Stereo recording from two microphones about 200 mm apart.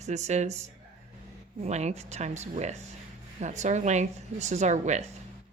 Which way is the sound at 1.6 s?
35° right (ahead or behind).